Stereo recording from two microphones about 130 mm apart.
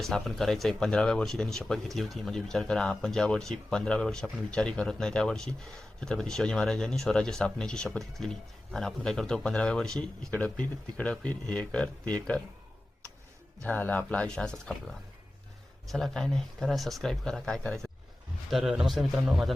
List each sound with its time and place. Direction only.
0.0 s speech: centre (ahead or behind)
13.7 s speech: 10° left (ahead or behind)
15.9 s speech: centre (ahead or behind)